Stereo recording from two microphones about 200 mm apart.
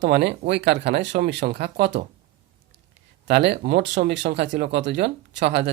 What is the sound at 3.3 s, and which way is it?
Speech, 60° right (ahead or behind).